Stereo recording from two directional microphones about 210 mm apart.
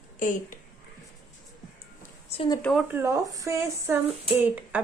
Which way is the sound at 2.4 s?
20° left (ahead or behind).